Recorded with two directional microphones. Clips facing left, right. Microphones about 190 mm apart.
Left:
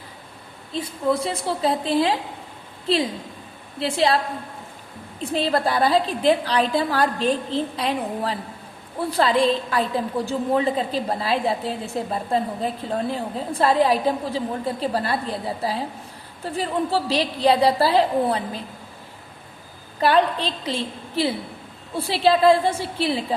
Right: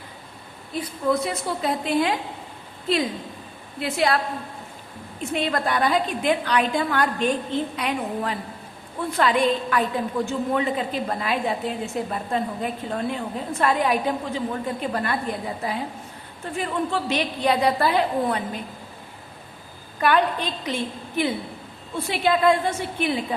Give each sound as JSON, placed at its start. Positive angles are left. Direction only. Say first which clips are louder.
{"t": 0.7, "sound": "a woman's voice", "louder": "left 1 dB", "side_deg": 30}
{"t": 3.8, "sound": "a woman's voice", "louder": "left 2 dB", "side_deg": 30}
{"t": 5.2, "sound": "a woman's voice", "louder": "left 3 dB", "side_deg": 35}
{"t": 20.0, "sound": "a woman's voice", "louder": "left 2 dB", "side_deg": 30}